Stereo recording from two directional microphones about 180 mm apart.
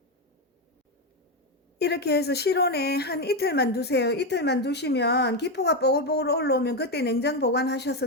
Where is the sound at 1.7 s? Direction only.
65° left (ahead or behind).